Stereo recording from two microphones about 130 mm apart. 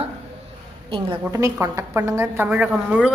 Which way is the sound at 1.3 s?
25° right (ahead or behind).